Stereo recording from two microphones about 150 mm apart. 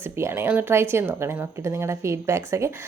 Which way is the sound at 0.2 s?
15° right (ahead or behind).